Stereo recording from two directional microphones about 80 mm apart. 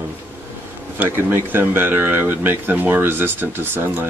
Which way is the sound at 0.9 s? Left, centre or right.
Right.